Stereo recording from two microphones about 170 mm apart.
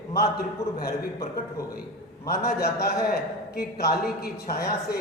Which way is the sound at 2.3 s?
65° left (ahead or behind).